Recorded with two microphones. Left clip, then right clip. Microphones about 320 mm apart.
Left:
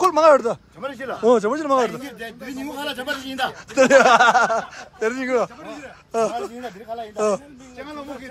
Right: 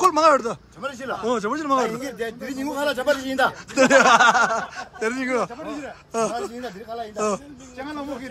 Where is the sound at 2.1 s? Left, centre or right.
Right.